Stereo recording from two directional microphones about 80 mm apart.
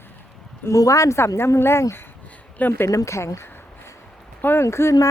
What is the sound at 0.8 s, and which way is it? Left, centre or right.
A woman's voice, left.